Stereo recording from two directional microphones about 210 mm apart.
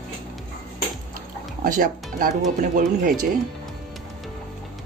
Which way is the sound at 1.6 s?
40° right (ahead or behind).